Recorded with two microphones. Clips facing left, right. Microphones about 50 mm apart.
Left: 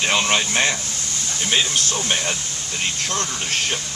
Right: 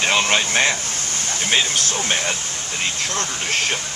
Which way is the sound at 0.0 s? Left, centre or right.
Right.